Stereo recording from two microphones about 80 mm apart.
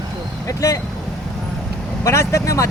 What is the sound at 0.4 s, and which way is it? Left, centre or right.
Speech, left.